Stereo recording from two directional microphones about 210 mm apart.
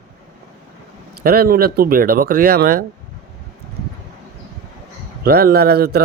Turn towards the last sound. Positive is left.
turn(degrees=-50)  # may be behind; listen again after turning